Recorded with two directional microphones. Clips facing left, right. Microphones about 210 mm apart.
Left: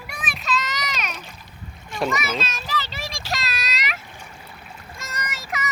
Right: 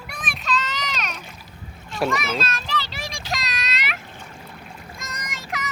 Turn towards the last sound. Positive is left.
turn(degrees=5)  # may be behind; listen again after turning